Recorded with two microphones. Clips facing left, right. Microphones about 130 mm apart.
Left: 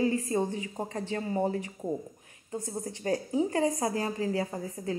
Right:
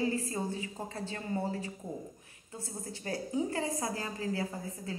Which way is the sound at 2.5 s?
25° left (ahead or behind).